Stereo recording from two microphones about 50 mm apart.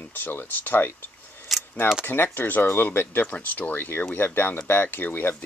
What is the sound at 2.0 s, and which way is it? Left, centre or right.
Speech, left.